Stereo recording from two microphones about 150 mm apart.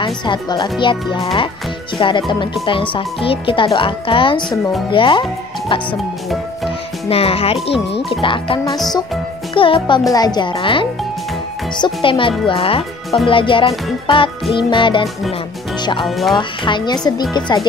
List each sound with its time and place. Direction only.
0.0 s speech: 30° left (ahead or behind)
7.1 s a child's voice: 40° left (ahead or behind)